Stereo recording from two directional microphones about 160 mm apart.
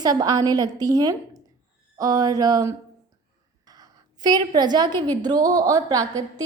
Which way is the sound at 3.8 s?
25° right (ahead or behind).